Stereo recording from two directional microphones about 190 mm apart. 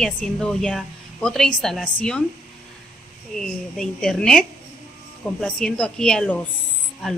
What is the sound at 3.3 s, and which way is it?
A woman's voice, 5° left (ahead or behind).